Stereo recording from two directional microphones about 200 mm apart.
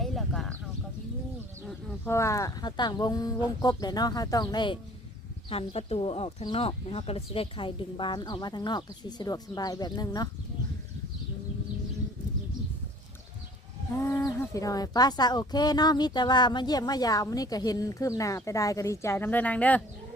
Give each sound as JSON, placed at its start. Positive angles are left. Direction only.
{"t": 0.0, "sound": "a sound", "side_deg": 0}
{"t": 2.0, "sound": "speech", "side_deg": 15}
{"t": 13.9, "sound": "speech", "side_deg": 15}